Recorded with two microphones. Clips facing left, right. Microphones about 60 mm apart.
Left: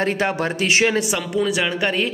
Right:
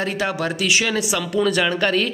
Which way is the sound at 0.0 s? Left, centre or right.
Left.